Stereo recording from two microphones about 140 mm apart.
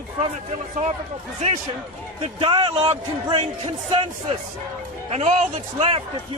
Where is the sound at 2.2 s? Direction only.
35° right (ahead or behind).